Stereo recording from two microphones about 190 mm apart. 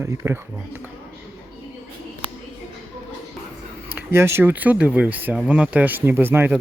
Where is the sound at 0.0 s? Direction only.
15° right (ahead or behind).